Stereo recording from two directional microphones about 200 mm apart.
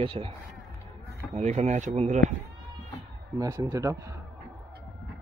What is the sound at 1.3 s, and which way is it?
Speech, 35° right (ahead or behind).